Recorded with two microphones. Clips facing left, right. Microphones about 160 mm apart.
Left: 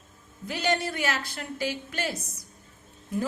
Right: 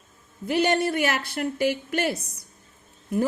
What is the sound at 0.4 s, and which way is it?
A woman's voice, 55° right (ahead or behind).